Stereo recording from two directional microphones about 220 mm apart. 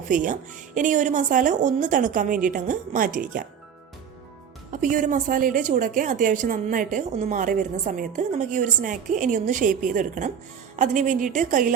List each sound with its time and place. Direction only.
0.1 s a woman's voice: 35° right (ahead or behind)
4.7 s a woman's voice: 35° right (ahead or behind)